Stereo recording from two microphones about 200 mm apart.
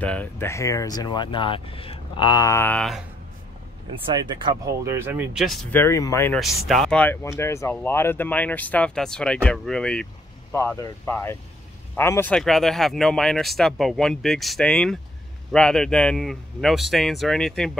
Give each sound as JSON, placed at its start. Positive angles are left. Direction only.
{"t": 0.0, "sound": "speech", "side_deg": 5}
{"t": 4.0, "sound": "speech", "side_deg": -25}
{"t": 6.4, "sound": "speech", "side_deg": 0}